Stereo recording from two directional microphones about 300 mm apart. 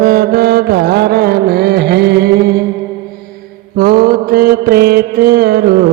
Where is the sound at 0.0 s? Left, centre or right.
Right.